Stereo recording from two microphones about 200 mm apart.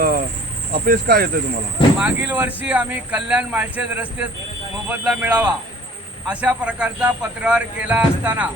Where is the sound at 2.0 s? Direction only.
5° right (ahead or behind).